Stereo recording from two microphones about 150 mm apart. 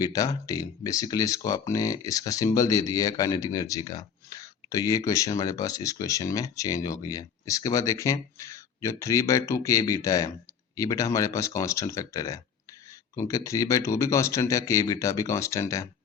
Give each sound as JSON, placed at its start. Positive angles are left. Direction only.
{"t": 0.0, "sound": "speech", "side_deg": 25}